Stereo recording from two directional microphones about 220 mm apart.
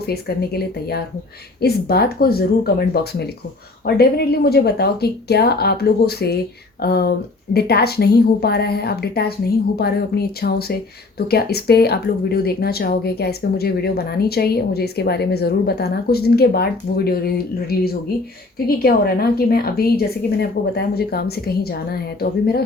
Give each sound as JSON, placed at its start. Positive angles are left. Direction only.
{"t": 0.0, "sound": "speech", "side_deg": 45}